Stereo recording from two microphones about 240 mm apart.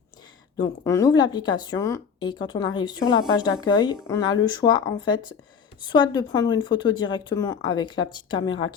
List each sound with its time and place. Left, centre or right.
0.6 s speech: centre